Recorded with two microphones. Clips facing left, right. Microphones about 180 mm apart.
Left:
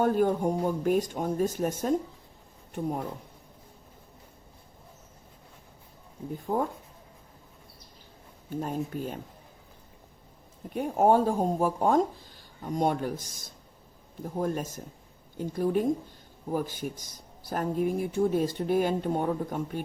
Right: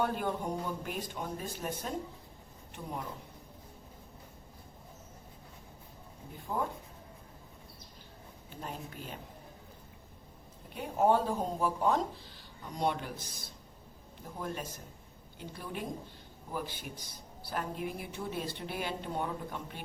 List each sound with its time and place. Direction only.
0.0 s a woman's voice: 45° left (ahead or behind)
6.5 s a woman's voice: 45° left (ahead or behind)
8.4 s a woman's voice: 45° left (ahead or behind)
10.8 s a woman's voice: 45° left (ahead or behind)